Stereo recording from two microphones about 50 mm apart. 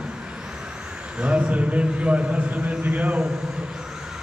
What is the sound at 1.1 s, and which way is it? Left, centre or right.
Speech, right.